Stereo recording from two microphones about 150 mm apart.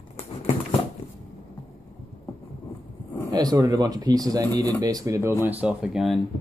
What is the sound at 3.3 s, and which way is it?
Speech, 25° right (ahead or behind).